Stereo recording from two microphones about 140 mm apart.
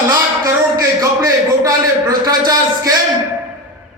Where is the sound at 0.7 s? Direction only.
25° right (ahead or behind).